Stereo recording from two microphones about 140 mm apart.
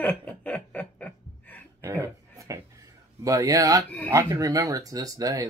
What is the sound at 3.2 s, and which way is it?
Speech, 25° right (ahead or behind).